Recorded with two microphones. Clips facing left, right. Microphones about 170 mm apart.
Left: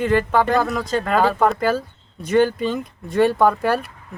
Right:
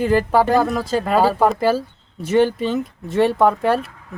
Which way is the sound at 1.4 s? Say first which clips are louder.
Right 2 dB; 5° right (ahead or behind).